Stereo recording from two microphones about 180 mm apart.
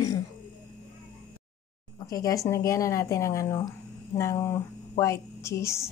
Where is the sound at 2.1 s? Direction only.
20° left (ahead or behind).